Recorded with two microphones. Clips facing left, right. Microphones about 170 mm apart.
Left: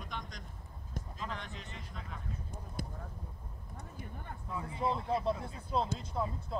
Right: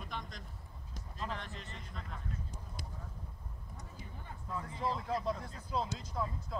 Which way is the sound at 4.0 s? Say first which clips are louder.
Left 5 dB; 55° left (ahead or behind).